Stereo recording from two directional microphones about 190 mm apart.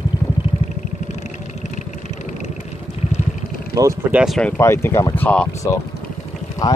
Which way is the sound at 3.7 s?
20° right (ahead or behind).